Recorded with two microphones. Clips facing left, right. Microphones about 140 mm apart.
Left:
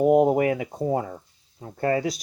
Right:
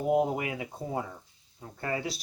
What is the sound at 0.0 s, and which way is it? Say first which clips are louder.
Speech: left 9 dB; 55° left (ahead or behind).